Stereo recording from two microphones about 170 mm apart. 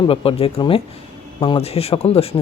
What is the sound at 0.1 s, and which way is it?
Speech, 30° left (ahead or behind).